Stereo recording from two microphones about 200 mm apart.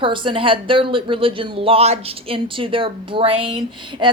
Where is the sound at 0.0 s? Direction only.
25° right (ahead or behind).